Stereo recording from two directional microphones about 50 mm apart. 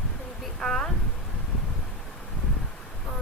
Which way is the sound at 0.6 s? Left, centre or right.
Centre.